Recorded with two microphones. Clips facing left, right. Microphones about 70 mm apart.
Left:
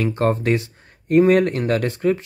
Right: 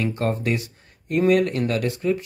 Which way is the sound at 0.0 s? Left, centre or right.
Left.